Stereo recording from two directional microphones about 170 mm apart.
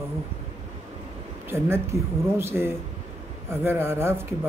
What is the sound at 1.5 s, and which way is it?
Speech, 15° right (ahead or behind).